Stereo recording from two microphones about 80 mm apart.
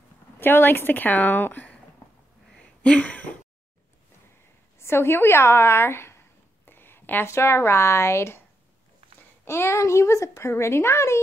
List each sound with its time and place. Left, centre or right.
0.4 s a woman's voice: left
2.5 s a sound: centre
4.7 s speech: left
9.4 s a child's voice: left